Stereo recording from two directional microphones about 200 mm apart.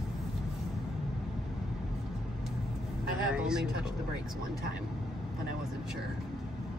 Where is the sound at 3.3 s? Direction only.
5° right (ahead or behind).